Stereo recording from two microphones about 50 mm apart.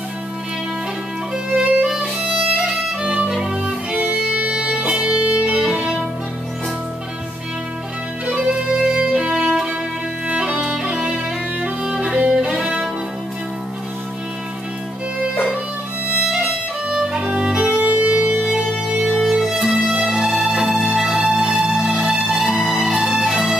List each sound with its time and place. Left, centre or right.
1.5 s music: right
3.3 s violin: centre
3.9 s music: right; by 5.9 s centre
8.3 s music: right
16.9 s violin: centre
17.6 s music: right
19.0 s music: centre
19.5 s music: centre